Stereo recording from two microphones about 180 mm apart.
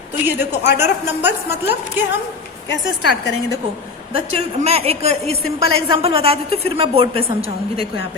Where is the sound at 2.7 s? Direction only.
80° left.